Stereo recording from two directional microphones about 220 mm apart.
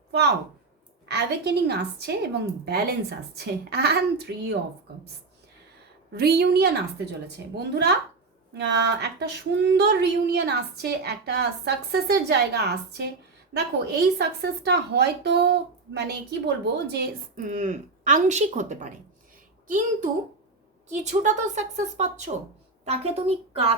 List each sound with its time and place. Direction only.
0.1 s a woman's voice: 50° right (ahead or behind)
6.1 s a woman's voice: 45° right (ahead or behind)
17.5 s a woman's voice: 35° right (ahead or behind)